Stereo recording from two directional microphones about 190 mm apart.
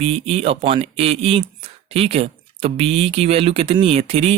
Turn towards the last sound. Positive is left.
turn(degrees=-30)  # may be behind; listen again after turning